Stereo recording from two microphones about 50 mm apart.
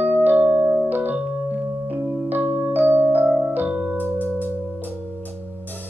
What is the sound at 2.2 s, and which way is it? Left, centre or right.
Music, right.